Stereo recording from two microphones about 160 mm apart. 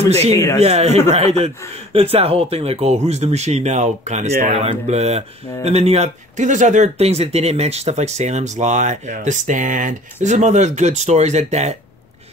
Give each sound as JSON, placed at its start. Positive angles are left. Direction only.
{"t": 0.1, "sound": "a man's voice", "side_deg": -40}